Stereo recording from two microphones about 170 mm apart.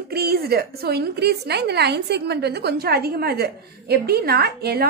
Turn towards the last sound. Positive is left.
turn(degrees=-70)  # may be behind; listen again after turning